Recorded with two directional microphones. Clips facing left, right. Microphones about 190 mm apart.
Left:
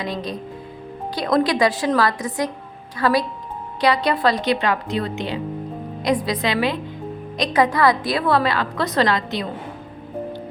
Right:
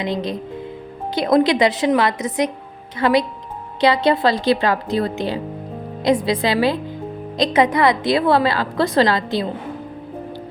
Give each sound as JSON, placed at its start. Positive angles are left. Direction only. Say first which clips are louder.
{"t": 0.0, "sound": "a woman's voice", "louder": "right 4 dB", "side_deg": -25}
{"t": 6.1, "sound": "a woman's voice", "louder": "right 4 dB", "side_deg": -25}